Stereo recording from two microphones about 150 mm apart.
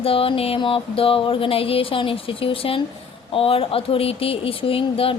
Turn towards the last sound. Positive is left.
turn(degrees=40)  # may be behind; listen again after turning